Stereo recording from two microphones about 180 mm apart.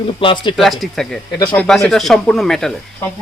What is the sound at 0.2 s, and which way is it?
Speech, 30° left (ahead or behind).